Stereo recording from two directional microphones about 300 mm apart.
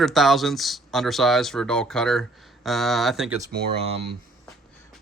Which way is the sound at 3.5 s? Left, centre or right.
Centre.